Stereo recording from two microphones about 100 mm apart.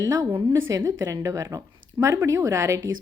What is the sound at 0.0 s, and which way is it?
Speech, 35° right (ahead or behind).